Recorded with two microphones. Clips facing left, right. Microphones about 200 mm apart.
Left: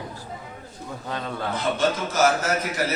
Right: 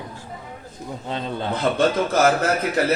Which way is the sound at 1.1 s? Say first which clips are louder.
Right 3 dB; 20° right (ahead or behind).